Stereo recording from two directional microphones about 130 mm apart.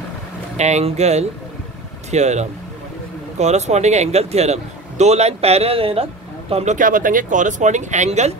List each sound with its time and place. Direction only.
0.6 s speech: 60° right (ahead or behind)
6.5 s speech: 65° right (ahead or behind)